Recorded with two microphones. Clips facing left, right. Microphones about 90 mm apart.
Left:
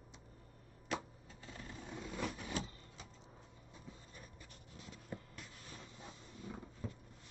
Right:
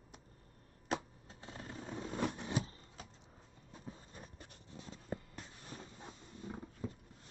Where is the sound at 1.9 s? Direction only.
35° right (ahead or behind).